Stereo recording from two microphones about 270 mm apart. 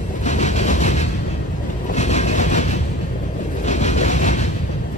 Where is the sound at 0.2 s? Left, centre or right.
Left.